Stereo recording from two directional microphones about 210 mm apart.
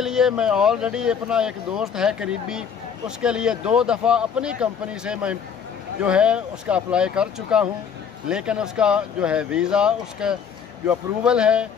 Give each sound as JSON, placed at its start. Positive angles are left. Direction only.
{"t": 0.0, "sound": "speech", "side_deg": 0}